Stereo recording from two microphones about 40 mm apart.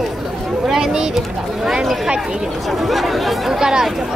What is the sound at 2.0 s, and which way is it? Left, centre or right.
Speech, centre.